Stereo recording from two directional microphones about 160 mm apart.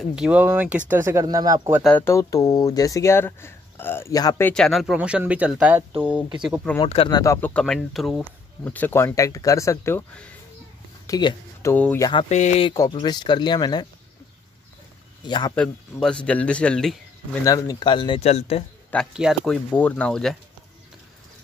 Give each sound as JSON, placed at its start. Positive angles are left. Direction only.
{"t": 0.1, "sound": "speech", "side_deg": -5}
{"t": 1.8, "sound": "speech", "side_deg": 10}
{"t": 4.5, "sound": "speech", "side_deg": 5}
{"t": 6.8, "sound": "speech", "side_deg": 30}
{"t": 7.2, "sound": "speech", "side_deg": 15}
{"t": 8.6, "sound": "speech", "side_deg": 10}
{"t": 11.7, "sound": "speech", "side_deg": 10}
{"t": 12.3, "sound": "speech", "side_deg": 45}
{"t": 12.6, "sound": "speech", "side_deg": 25}
{"t": 15.2, "sound": "speech", "side_deg": 25}
{"t": 15.5, "sound": "speech", "side_deg": 5}
{"t": 17.5, "sound": "speech", "side_deg": 20}
{"t": 19.1, "sound": "speech", "side_deg": 0}